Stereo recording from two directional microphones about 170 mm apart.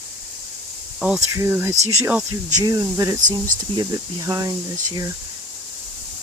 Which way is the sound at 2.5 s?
20° right (ahead or behind).